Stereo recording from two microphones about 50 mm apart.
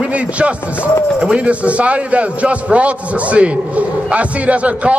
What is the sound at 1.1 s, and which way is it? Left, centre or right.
A man's voice, right.